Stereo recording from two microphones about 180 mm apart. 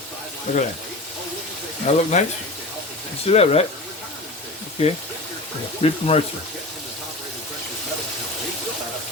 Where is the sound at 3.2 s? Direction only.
35° left (ahead or behind).